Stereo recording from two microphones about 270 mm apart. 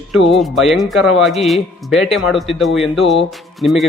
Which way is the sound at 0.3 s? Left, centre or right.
Centre.